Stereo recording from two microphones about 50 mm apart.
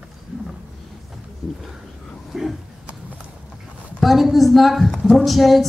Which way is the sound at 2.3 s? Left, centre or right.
Centre.